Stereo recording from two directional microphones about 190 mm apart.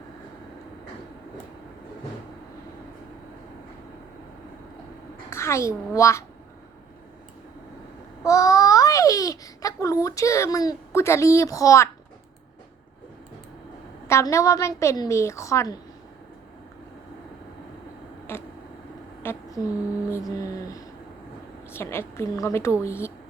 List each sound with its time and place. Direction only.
5.3 s a child's voice: 15° left (ahead or behind)
8.2 s babbling: 15° left (ahead or behind)
14.1 s a woman's voice: 15° left (ahead or behind)
18.3 s a sound: 10° left (ahead or behind)
21.7 s a woman's voice: 15° left (ahead or behind)